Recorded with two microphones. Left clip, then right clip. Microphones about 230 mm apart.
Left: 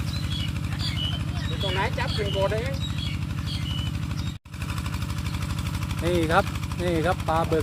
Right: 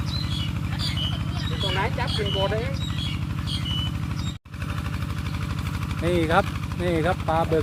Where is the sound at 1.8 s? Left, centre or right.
Left.